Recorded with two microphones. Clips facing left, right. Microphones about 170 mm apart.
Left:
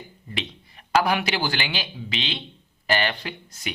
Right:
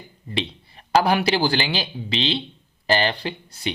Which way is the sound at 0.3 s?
30° right (ahead or behind).